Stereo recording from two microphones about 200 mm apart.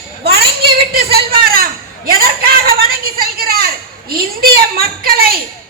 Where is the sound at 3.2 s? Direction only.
50° right (ahead or behind).